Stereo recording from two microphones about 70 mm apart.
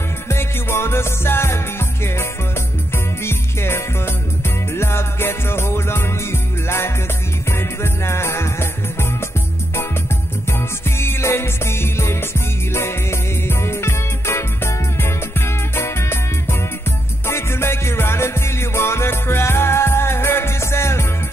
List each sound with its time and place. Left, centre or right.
0.3 s music: left
3.3 s music: left
7.5 s music: left
11.0 s music: left